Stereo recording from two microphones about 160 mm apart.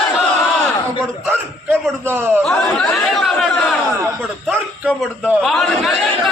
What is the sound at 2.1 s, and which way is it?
Speech, 15° right (ahead or behind).